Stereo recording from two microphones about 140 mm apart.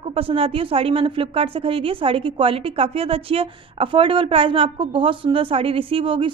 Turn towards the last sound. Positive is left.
turn(degrees=-40)  # may be behind; listen again after turning